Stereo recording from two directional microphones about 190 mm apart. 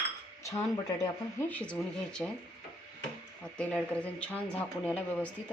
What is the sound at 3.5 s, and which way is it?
Speech, 5° left (ahead or behind).